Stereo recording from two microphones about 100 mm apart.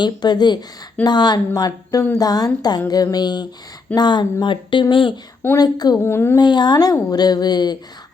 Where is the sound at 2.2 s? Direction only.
40° left (ahead or behind); by 5.1 s 55° left (ahead or behind).